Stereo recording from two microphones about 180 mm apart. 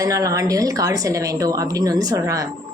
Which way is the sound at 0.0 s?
20° right (ahead or behind).